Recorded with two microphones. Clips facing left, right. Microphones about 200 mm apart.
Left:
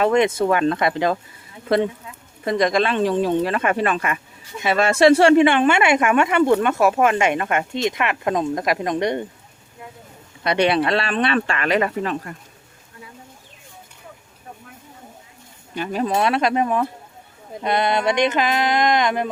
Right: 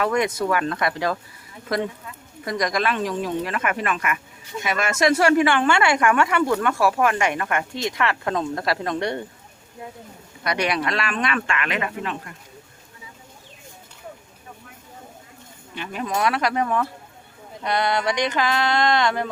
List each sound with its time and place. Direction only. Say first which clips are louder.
0.0 s speech: left 5 dB; 25° left (ahead or behind)
10.4 s speech: left 5 dB; 25° left (ahead or behind)
15.7 s speech: left 5 dB; 40° left (ahead or behind); by 19.3 s 20° left (ahead or behind)